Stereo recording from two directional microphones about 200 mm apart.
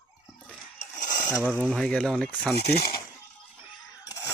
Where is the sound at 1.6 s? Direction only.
5° left (ahead or behind).